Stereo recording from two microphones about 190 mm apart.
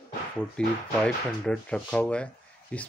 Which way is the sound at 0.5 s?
5° left (ahead or behind).